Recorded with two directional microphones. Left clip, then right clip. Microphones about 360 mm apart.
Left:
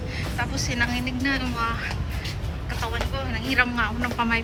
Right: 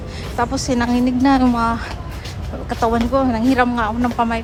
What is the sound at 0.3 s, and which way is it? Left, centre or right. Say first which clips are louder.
A woman's voice: right 8 dB; centre.